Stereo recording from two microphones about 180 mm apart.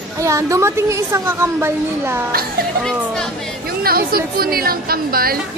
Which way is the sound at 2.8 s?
5° left (ahead or behind).